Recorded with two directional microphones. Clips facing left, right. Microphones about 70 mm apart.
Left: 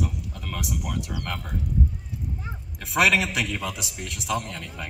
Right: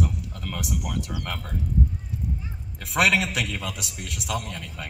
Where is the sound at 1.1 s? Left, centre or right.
Centre.